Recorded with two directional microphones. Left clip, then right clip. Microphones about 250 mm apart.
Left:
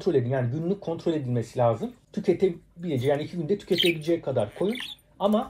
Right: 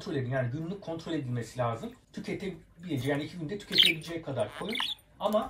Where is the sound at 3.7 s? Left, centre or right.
Centre.